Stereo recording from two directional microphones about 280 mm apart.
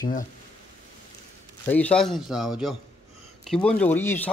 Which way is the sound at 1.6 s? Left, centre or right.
Centre.